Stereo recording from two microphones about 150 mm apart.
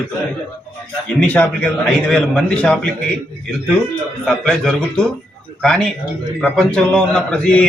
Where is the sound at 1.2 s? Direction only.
10° left (ahead or behind).